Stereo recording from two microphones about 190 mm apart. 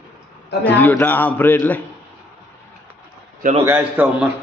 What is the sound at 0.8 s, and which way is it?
Speech, 10° left (ahead or behind).